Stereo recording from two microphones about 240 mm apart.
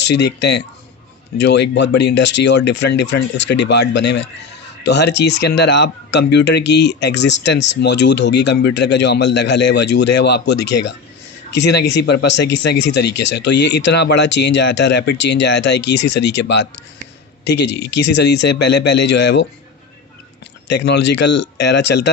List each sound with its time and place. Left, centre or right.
0.0 s speech: left
20.7 s speech: left